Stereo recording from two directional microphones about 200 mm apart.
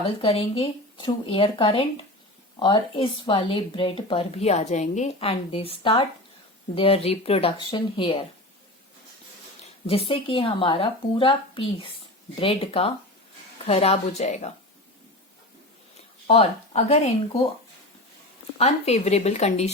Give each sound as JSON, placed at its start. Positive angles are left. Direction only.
{"t": 0.2, "sound": "speech", "side_deg": 25}
{"t": 9.8, "sound": "speech", "side_deg": 30}
{"t": 16.2, "sound": "speech", "side_deg": 30}
{"t": 18.5, "sound": "speech", "side_deg": 30}